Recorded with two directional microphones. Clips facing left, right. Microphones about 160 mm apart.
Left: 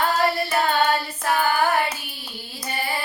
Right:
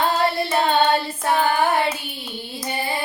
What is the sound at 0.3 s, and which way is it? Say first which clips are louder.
Child singing: right 2 dB; 25° right (ahead or behind).